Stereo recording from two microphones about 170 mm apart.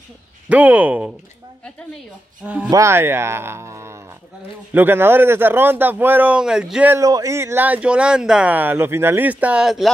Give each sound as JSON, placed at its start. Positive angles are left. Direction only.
{"t": 0.5, "sound": "speech", "side_deg": -10}
{"t": 2.4, "sound": "speech", "side_deg": -5}
{"t": 7.0, "sound": "speech", "side_deg": -20}